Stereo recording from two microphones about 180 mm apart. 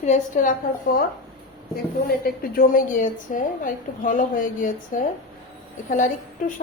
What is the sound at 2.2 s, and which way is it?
A woman's voice, 50° left (ahead or behind).